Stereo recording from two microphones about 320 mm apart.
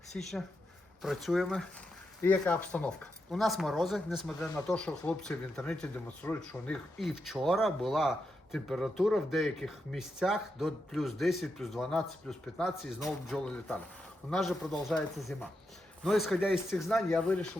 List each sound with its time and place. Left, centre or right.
0.1 s speech: centre